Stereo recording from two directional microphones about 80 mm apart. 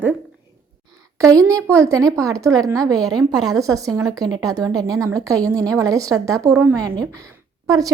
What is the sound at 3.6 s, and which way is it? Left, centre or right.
A woman's voice, right.